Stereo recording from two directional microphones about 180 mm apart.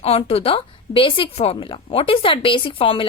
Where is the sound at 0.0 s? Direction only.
35° left (ahead or behind).